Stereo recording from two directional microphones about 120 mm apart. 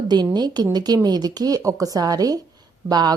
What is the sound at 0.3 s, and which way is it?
Speech, 35° right (ahead or behind).